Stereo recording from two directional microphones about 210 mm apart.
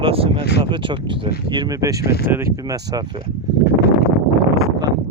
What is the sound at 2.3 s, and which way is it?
Speech, 10° right (ahead or behind).